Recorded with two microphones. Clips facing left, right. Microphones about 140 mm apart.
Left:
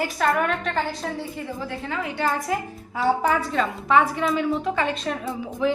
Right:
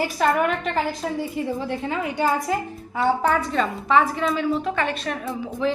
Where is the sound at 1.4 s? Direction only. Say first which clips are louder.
Right 5 dB; 25° right (ahead or behind).